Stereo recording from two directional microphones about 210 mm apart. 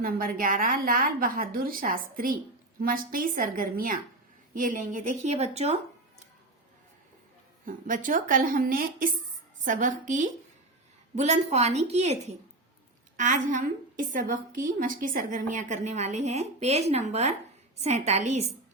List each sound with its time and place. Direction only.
0.0 s a woman's voice: 45° right (ahead or behind)
7.6 s a woman's voice: 40° right (ahead or behind)